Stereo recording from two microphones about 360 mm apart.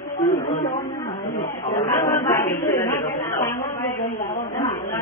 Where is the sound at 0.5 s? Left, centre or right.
Centre.